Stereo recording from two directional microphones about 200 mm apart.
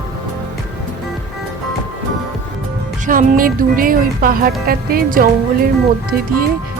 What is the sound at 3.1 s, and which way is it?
Speech, 45° right (ahead or behind).